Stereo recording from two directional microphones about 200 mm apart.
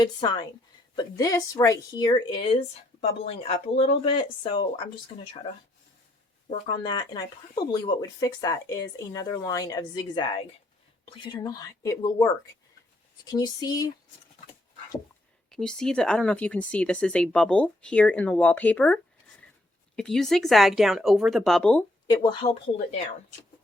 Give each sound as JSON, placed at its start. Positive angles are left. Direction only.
{"t": 0.0, "sound": "speech", "side_deg": 20}
{"t": 6.5, "sound": "speech", "side_deg": 20}
{"t": 15.4, "sound": "speech", "side_deg": 5}
{"t": 20.0, "sound": "speech", "side_deg": 0}
{"t": 22.0, "sound": "speech", "side_deg": 20}